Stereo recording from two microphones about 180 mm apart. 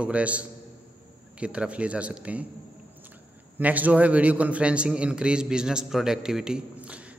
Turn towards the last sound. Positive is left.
turn(degrees=-5)  # may be behind; listen again after turning